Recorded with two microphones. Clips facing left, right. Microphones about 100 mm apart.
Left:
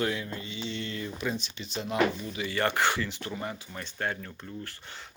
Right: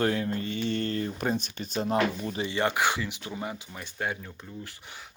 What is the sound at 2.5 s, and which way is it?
Speech, 15° right (ahead or behind).